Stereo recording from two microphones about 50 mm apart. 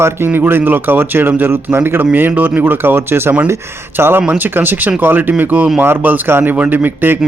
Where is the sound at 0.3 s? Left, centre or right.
Right.